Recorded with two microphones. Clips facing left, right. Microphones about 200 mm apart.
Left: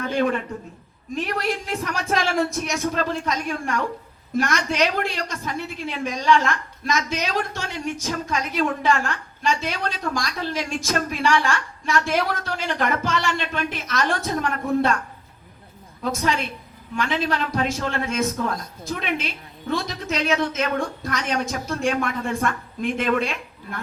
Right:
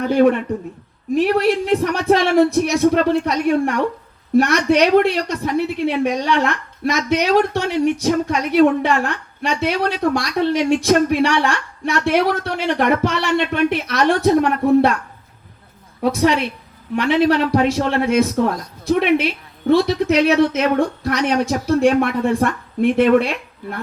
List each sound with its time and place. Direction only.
0.5 s speech: 35° right (ahead or behind)
1.1 s a woman's voice: 65° right (ahead or behind)
16.0 s a woman's voice: 65° right (ahead or behind)